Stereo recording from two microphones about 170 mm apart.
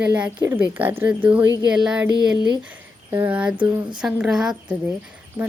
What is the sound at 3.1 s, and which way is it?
Speech, 10° right (ahead or behind).